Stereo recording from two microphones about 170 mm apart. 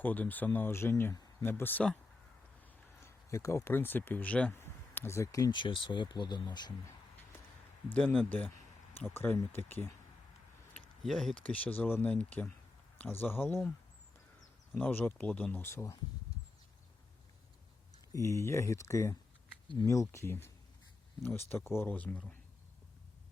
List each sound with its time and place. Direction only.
0.0 s speech: 10° left (ahead or behind)
7.9 s speech: 5° left (ahead or behind)
10.8 s speech: centre (ahead or behind)
14.7 s speech: 10° left (ahead or behind)
18.1 s speech: 15° left (ahead or behind)